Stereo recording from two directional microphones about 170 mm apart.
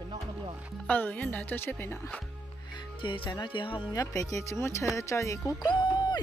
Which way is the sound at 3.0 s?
30° left (ahead or behind).